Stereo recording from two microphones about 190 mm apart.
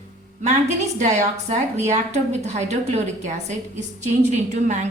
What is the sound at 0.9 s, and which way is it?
A woman's voice, 40° right (ahead or behind).